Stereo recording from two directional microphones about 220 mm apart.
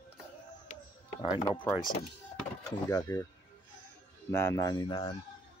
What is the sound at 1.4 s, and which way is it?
Speech, 20° left (ahead or behind).